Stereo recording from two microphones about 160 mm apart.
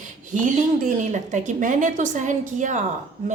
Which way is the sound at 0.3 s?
50° right (ahead or behind).